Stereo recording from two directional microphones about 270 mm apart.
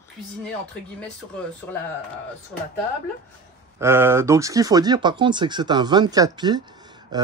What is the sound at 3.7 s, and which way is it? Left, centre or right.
Speech, centre.